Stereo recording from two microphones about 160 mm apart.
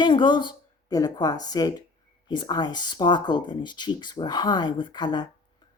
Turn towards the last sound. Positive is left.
turn(degrees=25)  # may be behind; listen again after turning